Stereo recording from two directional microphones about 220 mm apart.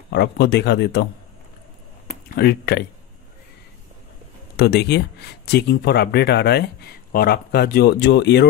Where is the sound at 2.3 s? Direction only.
45° left (ahead or behind).